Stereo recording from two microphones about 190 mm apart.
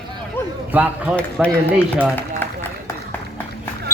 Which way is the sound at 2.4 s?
10° left (ahead or behind).